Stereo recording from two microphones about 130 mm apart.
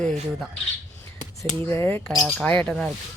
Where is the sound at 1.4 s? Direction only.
20° left (ahead or behind).